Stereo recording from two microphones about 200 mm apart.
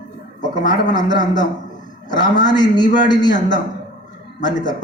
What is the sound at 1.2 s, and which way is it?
Speech, 20° left (ahead or behind).